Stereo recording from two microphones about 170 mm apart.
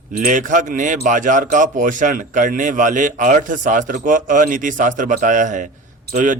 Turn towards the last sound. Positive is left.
turn(degrees=-60)  # may be behind; listen again after turning